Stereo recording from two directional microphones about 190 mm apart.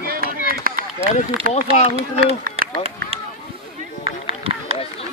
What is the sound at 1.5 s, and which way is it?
Speech, 35° left (ahead or behind).